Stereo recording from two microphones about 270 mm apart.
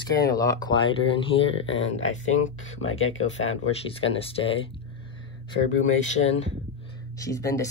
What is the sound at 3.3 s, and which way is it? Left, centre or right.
Speech, left.